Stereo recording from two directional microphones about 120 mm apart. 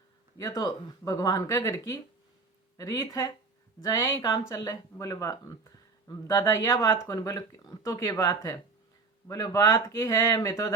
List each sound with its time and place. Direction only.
0.3 s speech: 30° left (ahead or behind)